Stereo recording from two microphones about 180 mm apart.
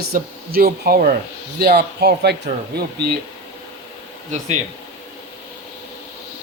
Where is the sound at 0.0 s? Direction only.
55° right (ahead or behind).